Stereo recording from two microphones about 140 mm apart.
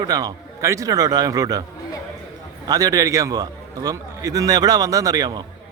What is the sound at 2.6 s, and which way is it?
A man's voice, 25° right (ahead or behind).